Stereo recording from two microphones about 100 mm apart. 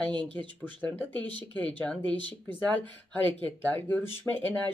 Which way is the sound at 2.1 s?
50° right (ahead or behind).